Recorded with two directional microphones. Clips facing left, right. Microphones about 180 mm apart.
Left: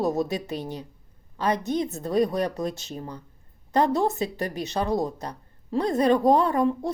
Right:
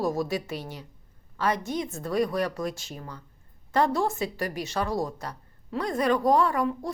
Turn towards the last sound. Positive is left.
turn(degrees=25)  # may be behind; listen again after turning